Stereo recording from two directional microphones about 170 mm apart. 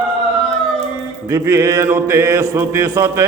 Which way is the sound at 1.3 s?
15° right (ahead or behind).